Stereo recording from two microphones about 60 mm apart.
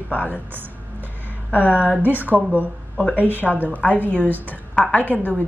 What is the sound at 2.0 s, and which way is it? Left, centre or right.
A woman's voice, right.